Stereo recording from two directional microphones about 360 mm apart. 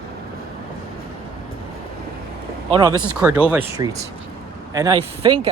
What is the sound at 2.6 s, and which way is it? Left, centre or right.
Speech, centre.